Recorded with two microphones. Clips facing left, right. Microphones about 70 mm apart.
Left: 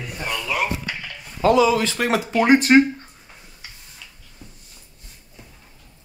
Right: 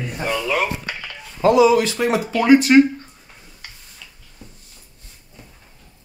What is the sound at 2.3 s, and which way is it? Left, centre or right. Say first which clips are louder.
Speech: right 2 dB; left.